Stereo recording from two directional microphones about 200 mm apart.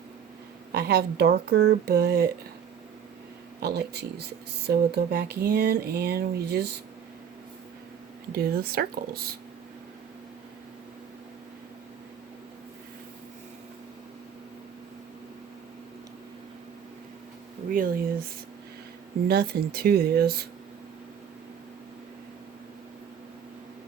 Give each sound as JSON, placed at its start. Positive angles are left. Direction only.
{"t": 0.7, "sound": "speech", "side_deg": -55}
{"t": 3.6, "sound": "speech", "side_deg": -55}
{"t": 8.3, "sound": "speech", "side_deg": -50}
{"t": 17.7, "sound": "speech", "side_deg": -45}
{"t": 19.3, "sound": "speech", "side_deg": -50}